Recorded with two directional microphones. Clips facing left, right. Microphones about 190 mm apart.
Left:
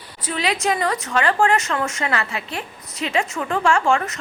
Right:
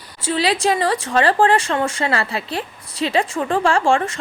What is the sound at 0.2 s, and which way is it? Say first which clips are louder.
A woman's voice: right 4 dB; 30° right (ahead or behind).